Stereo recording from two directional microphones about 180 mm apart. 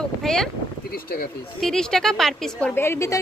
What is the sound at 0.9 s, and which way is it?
Speech, 55° left (ahead or behind).